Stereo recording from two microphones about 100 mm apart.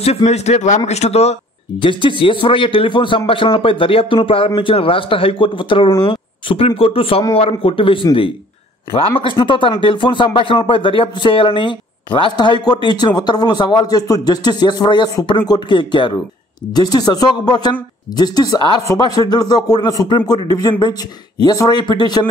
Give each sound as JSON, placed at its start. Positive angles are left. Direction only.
{"t": 0.0, "sound": "speech", "side_deg": 90}
{"t": 16.7, "sound": "speech", "side_deg": 40}